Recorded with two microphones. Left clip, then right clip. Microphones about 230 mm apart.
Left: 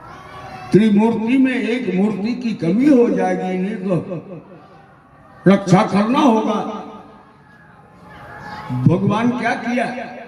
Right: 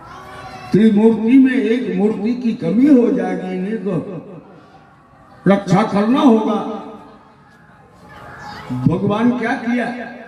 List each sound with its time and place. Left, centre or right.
0.7 s a man's voice: left
5.5 s a man's voice: left
8.9 s a man's voice: left